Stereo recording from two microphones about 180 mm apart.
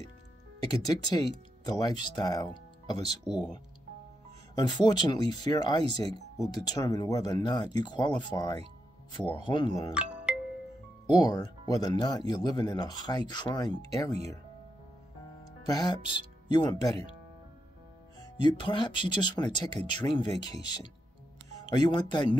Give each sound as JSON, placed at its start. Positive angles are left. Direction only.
{"t": 0.7, "sound": "speech", "side_deg": 20}
{"t": 3.3, "sound": "speech", "side_deg": 0}
{"t": 4.6, "sound": "speech", "side_deg": 25}
{"t": 10.3, "sound": "music", "side_deg": -5}
{"t": 11.1, "sound": "speech", "side_deg": 20}
{"t": 15.6, "sound": "speech", "side_deg": 20}
{"t": 18.2, "sound": "speech", "side_deg": 25}